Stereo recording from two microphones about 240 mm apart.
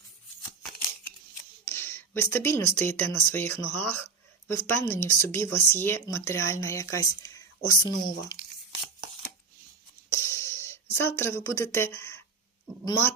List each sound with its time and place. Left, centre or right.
1.6 s a sound: centre
3.1 s speech: centre
10.1 s music: centre
10.9 s speech: centre